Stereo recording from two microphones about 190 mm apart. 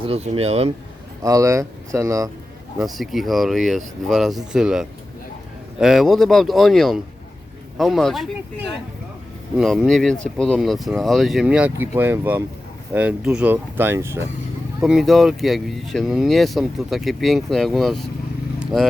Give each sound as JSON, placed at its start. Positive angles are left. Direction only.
{"t": 0.0, "sound": "speech", "side_deg": -30}
{"t": 1.2, "sound": "speech", "side_deg": -15}
{"t": 2.7, "sound": "speech", "side_deg": 0}
{"t": 14.8, "sound": "speech", "side_deg": 0}